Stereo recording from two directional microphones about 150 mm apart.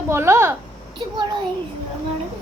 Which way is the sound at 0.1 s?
15° right (ahead or behind).